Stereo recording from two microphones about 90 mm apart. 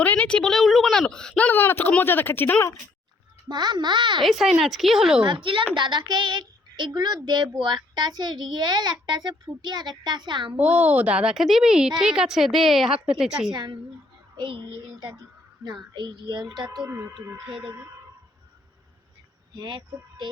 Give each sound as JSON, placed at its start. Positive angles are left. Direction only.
{"t": 0.0, "sound": "a woman's voice", "side_deg": 15}
{"t": 3.5, "sound": "a child's voice", "side_deg": -50}
{"t": 4.2, "sound": "a woman's voice", "side_deg": 0}
{"t": 5.2, "sound": "speech", "side_deg": -70}
{"t": 5.7, "sound": "a child's voice", "side_deg": -60}
{"t": 10.5, "sound": "a woman's voice", "side_deg": -15}
{"t": 13.5, "sound": "speech", "side_deg": -50}
{"t": 14.3, "sound": "a child's voice", "side_deg": -65}
{"t": 14.8, "sound": "a child's voice", "side_deg": -50}
{"t": 16.5, "sound": "a woman's voice", "side_deg": -5}
{"t": 16.9, "sound": "speech", "side_deg": -30}
{"t": 19.5, "sound": "a child's voice", "side_deg": -55}